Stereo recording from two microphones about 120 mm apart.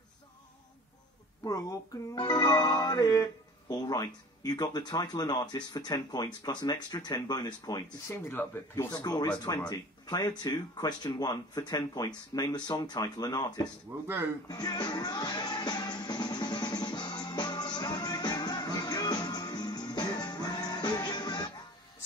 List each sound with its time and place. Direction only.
1.4 s speech: 30° left (ahead or behind)
8.4 s speech: 20° left (ahead or behind)
8.7 s speech: 35° left (ahead or behind)
13.9 s speech: 15° right (ahead or behind)
14.5 s music: 35° left (ahead or behind)